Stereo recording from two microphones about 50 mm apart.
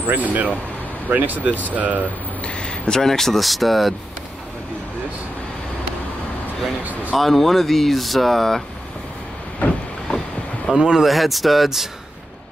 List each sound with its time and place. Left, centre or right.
0.0 s speech: right
2.9 s speech: centre
6.8 s a sound: right
7.2 s speech: centre
10.1 s boat: centre
10.7 s speech: centre